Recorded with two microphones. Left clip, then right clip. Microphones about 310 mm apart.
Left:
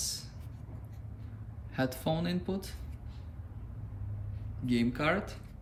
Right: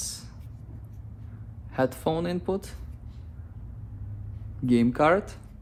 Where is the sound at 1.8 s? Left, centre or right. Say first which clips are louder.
Right 7 dB; centre.